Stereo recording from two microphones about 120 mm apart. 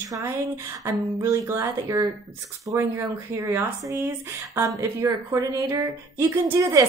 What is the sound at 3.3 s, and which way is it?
Speech, 25° right (ahead or behind).